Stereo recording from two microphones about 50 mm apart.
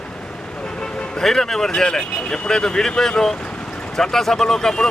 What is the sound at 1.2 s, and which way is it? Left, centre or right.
Speech, centre.